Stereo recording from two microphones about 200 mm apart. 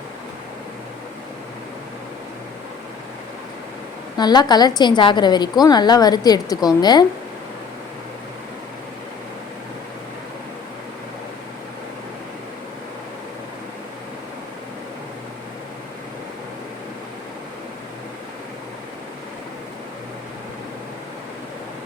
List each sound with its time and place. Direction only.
4.2 s a woman's voice: 20° left (ahead or behind)